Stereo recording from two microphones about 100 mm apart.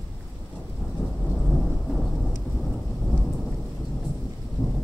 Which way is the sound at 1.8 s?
5° left (ahead or behind).